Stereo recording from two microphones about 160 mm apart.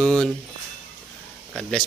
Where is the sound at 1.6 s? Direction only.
5° left (ahead or behind).